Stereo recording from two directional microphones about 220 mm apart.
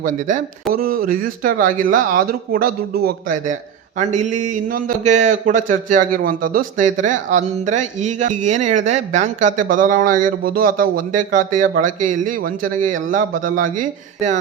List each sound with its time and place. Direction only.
0.0 s speech: 35° right (ahead or behind)